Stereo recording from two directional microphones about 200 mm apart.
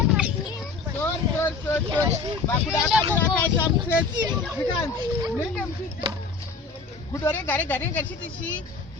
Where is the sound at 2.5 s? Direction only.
10° left (ahead or behind).